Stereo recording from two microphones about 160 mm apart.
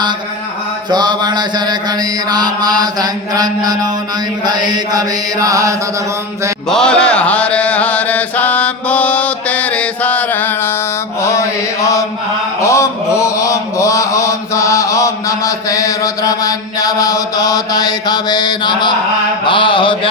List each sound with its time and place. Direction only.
0.9 s mantra: 25° right (ahead or behind)
6.7 s chant: 5° left (ahead or behind)
11.2 s mantra: 20° left (ahead or behind)